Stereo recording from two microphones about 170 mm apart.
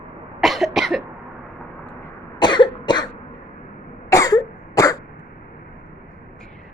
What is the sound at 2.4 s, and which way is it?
Cough, 25° left (ahead or behind).